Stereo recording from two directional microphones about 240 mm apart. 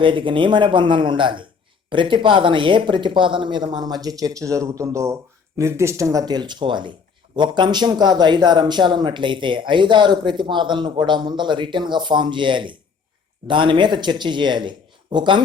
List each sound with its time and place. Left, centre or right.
0.0 s speech: right